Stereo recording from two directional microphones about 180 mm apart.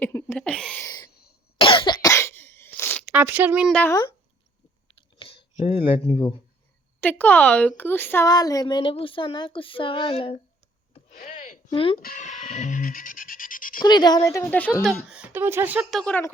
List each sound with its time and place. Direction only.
0.0 s a sound: 15° left (ahead or behind)
0.9 s a sound: 20° left (ahead or behind)
1.5 s cough: 30° left (ahead or behind); by 3.1 s 15° left (ahead or behind)
3.1 s speech: 10° right (ahead or behind)
3.7 s a woman's voice: 5° left (ahead or behind)
5.6 s speech: 30° left (ahead or behind)
7.0 s a woman's voice: 10° left (ahead or behind); by 10.3 s 30° left (ahead or behind)
11.2 s a sound: 45° left (ahead or behind)
11.7 s speech: 30° left (ahead or behind)
11.9 s speech: 50° left (ahead or behind)
13.8 s speech: 25° left (ahead or behind)
14.8 s speech: 5° right (ahead or behind)